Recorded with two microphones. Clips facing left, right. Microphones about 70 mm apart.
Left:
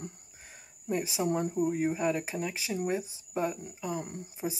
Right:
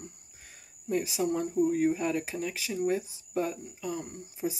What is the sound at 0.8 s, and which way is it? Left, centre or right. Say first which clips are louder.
Speech: right 1 dB; left.